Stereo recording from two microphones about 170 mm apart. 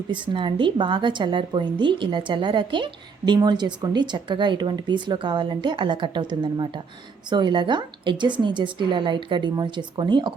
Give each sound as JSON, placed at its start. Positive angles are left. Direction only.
{"t": 0.1, "sound": "a woman's voice", "side_deg": -30}